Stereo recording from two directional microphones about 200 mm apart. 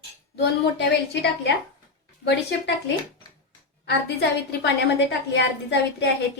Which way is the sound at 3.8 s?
60° left (ahead or behind).